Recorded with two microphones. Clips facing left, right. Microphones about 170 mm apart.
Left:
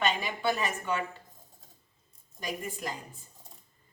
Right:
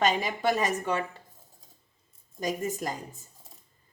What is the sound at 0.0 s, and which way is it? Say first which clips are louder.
A woman's voice: right 4 dB; 40° right (ahead or behind).